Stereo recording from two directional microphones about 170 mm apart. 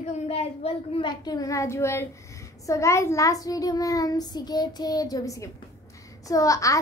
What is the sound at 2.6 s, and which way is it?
Child singing, 20° left (ahead or behind).